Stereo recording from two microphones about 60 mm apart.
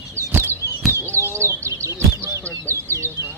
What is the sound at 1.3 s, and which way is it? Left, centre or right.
Bird, right.